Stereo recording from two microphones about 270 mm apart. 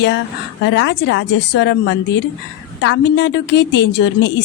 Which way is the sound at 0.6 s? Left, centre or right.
Left.